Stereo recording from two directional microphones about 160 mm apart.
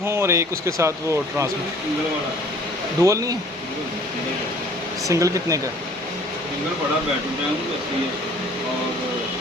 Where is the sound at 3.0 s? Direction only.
20° right (ahead or behind).